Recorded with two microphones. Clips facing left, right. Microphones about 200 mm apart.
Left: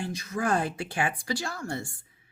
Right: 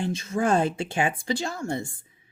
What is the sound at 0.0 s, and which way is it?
A woman's voice, 25° right (ahead or behind).